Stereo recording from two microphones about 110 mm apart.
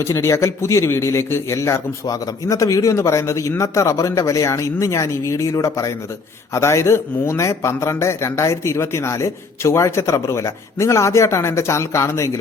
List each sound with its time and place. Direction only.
0.0 s a man's voice: 25° left (ahead or behind)